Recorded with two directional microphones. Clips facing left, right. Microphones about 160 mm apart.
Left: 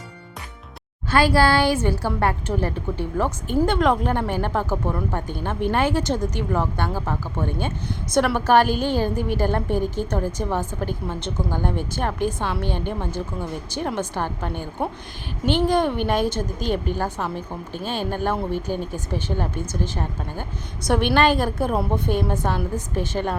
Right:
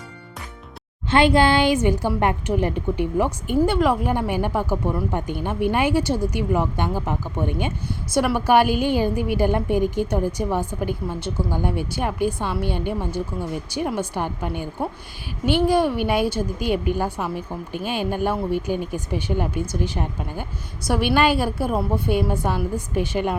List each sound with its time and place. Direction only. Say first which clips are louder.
1.1 s a woman's voice: right 1 dB; 20° right (ahead or behind)